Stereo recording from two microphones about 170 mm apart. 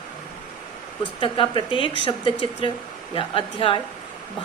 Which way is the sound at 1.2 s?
30° left (ahead or behind).